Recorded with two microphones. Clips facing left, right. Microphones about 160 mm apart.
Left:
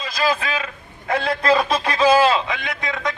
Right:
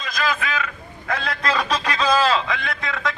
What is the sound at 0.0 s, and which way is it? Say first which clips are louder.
A man's voice: left 3 dB; 30° left (ahead or behind).